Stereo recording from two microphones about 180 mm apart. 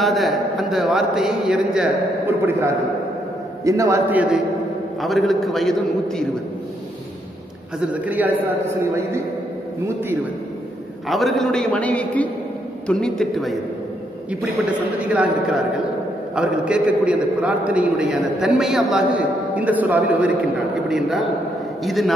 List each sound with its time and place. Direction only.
0.0 s a man's voice: centre (ahead or behind)
7.8 s a man's voice: 10° right (ahead or behind)
11.1 s a man's voice: centre (ahead or behind)
15.0 s a man's voice: 5° right (ahead or behind)
21.8 s a man's voice: centre (ahead or behind)